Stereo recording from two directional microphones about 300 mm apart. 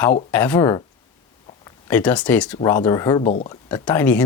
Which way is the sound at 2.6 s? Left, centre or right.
Centre.